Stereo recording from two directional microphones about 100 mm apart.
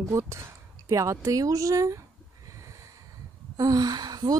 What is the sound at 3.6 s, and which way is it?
Speech, 40° right (ahead or behind).